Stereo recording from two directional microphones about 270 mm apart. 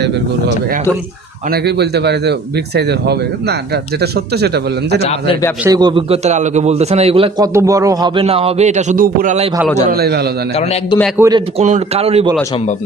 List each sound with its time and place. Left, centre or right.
1.6 s speech: right
4.0 s speech: right
4.9 s a man's voice: left
5.6 s a man's voice: centre; by 10.2 s right
11.2 s a man's voice: centre